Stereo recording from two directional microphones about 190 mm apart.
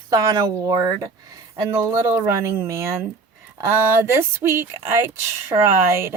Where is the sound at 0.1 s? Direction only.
20° right (ahead or behind).